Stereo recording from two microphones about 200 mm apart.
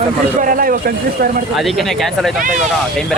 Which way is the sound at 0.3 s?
45° right (ahead or behind).